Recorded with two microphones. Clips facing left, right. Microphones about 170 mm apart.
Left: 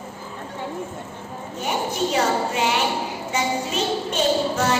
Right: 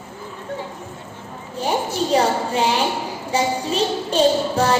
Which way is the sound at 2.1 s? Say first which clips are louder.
Right 5 dB; 30° right (ahead or behind).